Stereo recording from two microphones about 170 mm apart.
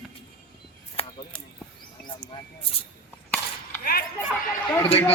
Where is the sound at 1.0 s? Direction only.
35° left (ahead or behind).